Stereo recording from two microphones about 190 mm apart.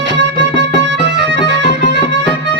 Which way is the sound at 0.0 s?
65° right (ahead or behind).